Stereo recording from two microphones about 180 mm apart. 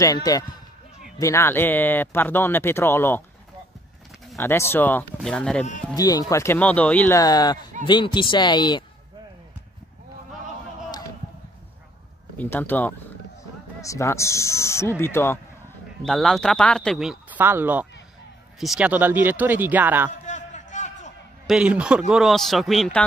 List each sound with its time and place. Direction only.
0.0 s speech: 20° left (ahead or behind)
4.4 s a man's voice: 15° left (ahead or behind)
5.9 s speech: 20° left (ahead or behind)
7.2 s speech: 20° left (ahead or behind)
12.4 s speech: 10° left (ahead or behind)
16.0 s a man's voice: centre (ahead or behind)
20.1 s a sound: 45° left (ahead or behind)
21.5 s a man's voice: 5° right (ahead or behind)